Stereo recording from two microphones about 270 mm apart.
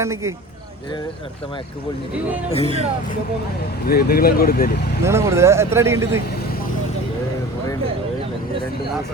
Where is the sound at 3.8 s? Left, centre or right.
Left.